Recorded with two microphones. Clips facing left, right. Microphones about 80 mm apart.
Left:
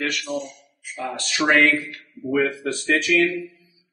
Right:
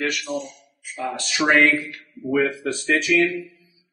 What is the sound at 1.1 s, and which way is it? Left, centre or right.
Speech, centre.